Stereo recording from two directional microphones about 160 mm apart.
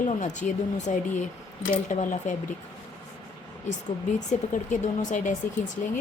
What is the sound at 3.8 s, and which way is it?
A woman's voice, 50° left (ahead or behind).